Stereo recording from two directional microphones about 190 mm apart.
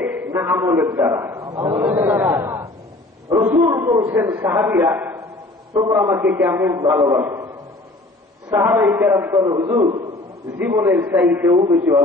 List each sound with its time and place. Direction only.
0.0 s a man's voice: 10° right (ahead or behind)
8.5 s a man's voice: 15° right (ahead or behind)